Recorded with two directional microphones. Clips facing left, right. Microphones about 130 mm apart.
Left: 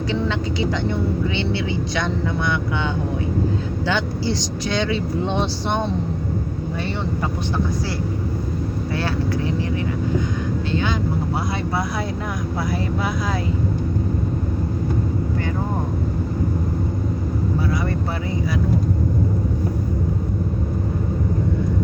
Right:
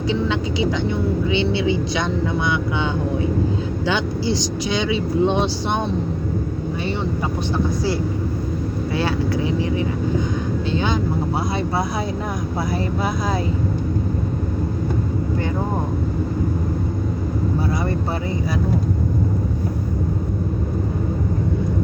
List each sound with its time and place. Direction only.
0.1 s speech: 15° right (ahead or behind)
9.0 s speech: 15° right (ahead or behind)
10.8 s vehicle: 25° right (ahead or behind)